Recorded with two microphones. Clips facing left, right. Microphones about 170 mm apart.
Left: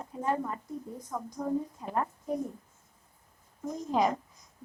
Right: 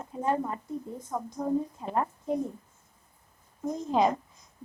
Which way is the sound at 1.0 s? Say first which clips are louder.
Right 2 dB; 25° right (ahead or behind).